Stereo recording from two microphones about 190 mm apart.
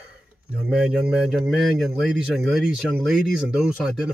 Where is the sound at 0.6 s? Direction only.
5° right (ahead or behind).